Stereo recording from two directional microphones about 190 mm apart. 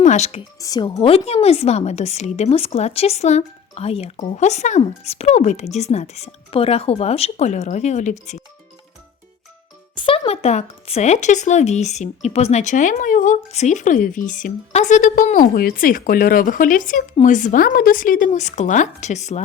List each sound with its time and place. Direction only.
0.0 s speech: 35° left (ahead or behind)
0.6 s speech: 20° left (ahead or behind); by 8.4 s 40° left (ahead or behind)
9.9 s a woman's voice: 25° left (ahead or behind)